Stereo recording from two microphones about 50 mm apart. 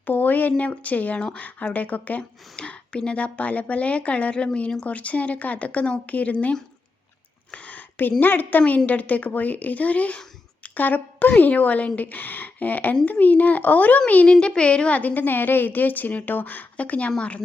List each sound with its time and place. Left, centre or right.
0.0 s a woman's voice: left
2.6 s a woman's voice: centre
7.5 s a sound: left
8.2 s a woman's voice: left
14.4 s a woman's voice: left